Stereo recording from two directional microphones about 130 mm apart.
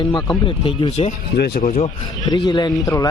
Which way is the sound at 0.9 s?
65° left (ahead or behind).